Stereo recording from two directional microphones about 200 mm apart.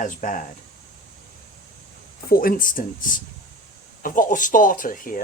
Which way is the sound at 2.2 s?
45° left (ahead or behind).